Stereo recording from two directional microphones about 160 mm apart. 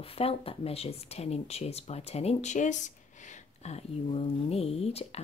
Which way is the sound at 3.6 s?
40° left (ahead or behind).